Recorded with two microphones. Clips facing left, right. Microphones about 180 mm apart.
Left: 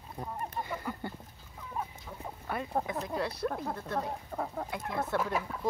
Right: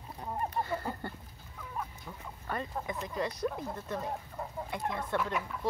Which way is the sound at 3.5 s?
65° left (ahead or behind).